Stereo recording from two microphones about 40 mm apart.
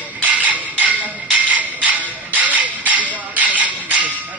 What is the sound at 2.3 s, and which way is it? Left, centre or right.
Music, right.